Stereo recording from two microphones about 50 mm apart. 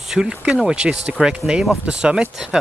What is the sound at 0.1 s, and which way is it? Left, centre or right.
Speech, centre.